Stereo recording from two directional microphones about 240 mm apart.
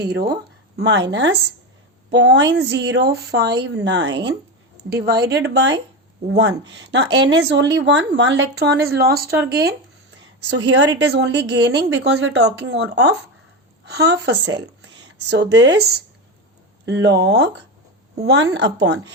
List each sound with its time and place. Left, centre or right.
0.0 s speech: right
10.8 s speech: right